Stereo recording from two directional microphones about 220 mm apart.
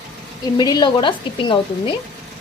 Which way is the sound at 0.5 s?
20° left (ahead or behind).